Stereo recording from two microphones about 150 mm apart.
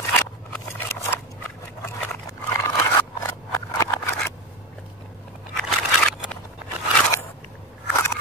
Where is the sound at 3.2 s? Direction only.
25° left (ahead or behind).